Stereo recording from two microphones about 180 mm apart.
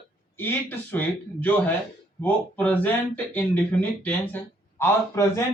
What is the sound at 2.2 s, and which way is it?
Speech, 10° left (ahead or behind).